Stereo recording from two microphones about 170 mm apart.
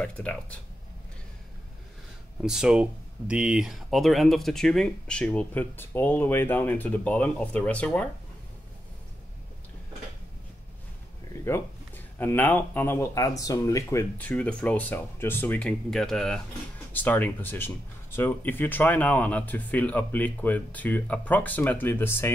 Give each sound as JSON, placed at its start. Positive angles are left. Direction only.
{"t": 0.0, "sound": "speech", "side_deg": 5}
{"t": 2.4, "sound": "speech", "side_deg": -5}
{"t": 11.4, "sound": "speech", "side_deg": 15}